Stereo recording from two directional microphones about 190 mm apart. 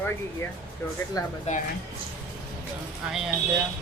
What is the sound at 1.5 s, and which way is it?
Speech, 35° left (ahead or behind).